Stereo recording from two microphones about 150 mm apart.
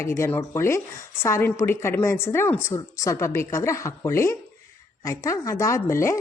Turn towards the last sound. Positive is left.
turn(degrees=20)  # may be behind; listen again after turning